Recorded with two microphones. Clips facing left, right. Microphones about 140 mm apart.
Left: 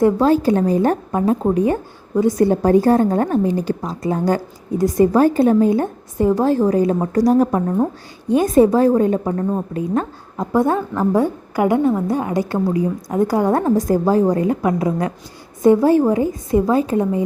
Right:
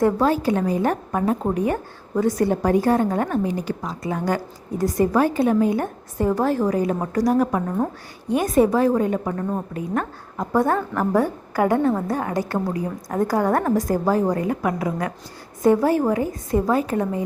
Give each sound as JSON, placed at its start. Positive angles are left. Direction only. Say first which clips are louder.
{"t": 0.0, "sound": "a woman's voice", "louder": "left 5 dB", "side_deg": 30}